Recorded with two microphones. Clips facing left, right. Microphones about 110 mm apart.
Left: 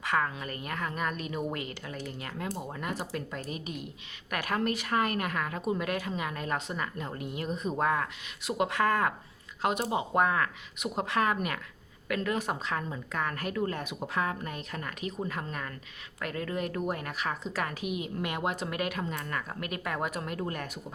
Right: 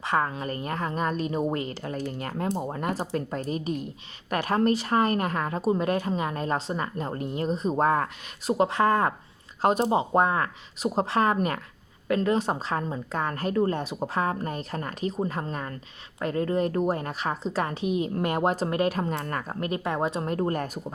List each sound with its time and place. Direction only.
0.0 s a woman's voice: 30° right (ahead or behind)